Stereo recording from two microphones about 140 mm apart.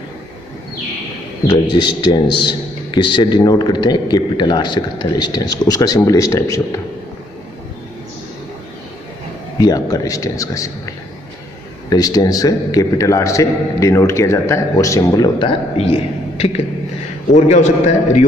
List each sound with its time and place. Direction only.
1.5 s a man's voice: 30° left (ahead or behind)
9.6 s a man's voice: 25° left (ahead or behind)
11.9 s a man's voice: 30° left (ahead or behind); by 17.9 s 55° left (ahead or behind)